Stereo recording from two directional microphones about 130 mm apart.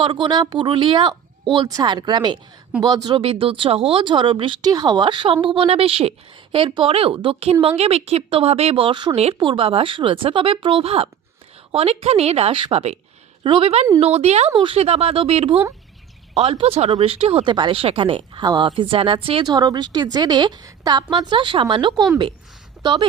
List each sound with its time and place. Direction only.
0.0 s a woman's voice: 40° right (ahead or behind); by 14.5 s 55° right (ahead or behind)
14.5 s a woman's voice: 40° right (ahead or behind)
14.8 s a woman's voice: 50° right (ahead or behind)